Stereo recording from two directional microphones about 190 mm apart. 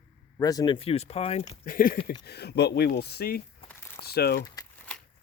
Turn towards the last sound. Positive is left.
turn(degrees=55)  # may be behind; listen again after turning